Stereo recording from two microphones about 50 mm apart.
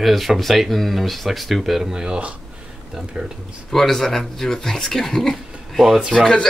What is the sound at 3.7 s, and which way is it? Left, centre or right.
Speech, centre.